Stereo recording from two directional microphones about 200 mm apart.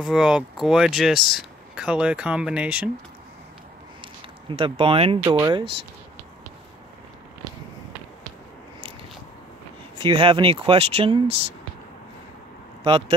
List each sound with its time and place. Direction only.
0.0 s speech: 5° right (ahead or behind)
4.0 s speech: 25° right (ahead or behind)
9.9 s speech: 25° right (ahead or behind)